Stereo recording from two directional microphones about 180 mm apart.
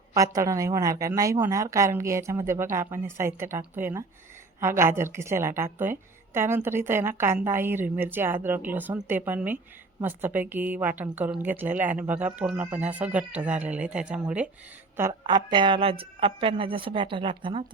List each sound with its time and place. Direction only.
0.1 s a woman's voice: 15° right (ahead or behind)
15.3 s a woman's voice: 25° right (ahead or behind)